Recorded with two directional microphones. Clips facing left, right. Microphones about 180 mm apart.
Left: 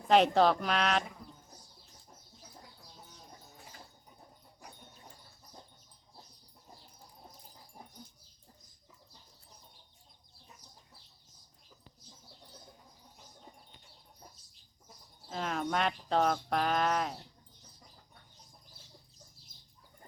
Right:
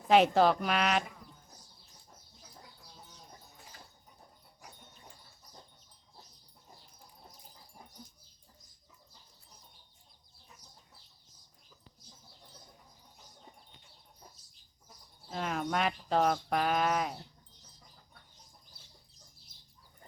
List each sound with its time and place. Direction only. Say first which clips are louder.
0.1 s speech: right 1 dB; 5° right (ahead or behind)
15.3 s speech: even; centre (ahead or behind)